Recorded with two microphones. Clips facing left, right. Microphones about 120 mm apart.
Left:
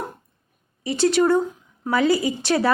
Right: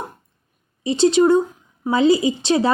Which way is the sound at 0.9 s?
20° right (ahead or behind).